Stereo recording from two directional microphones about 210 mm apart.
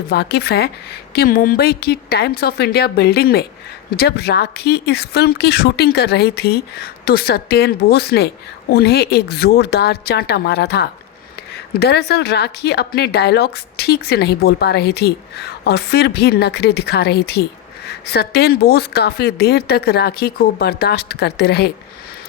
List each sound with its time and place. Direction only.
0.1 s speech: 50° left (ahead or behind)